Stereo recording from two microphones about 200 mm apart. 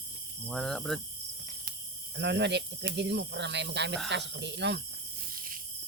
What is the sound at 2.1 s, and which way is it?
Speech, 60° right (ahead or behind).